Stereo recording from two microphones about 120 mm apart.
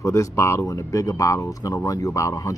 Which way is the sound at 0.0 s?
25° left (ahead or behind).